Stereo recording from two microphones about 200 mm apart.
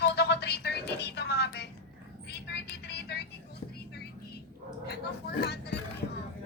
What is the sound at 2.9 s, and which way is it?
Vehicle, 55° left (ahead or behind).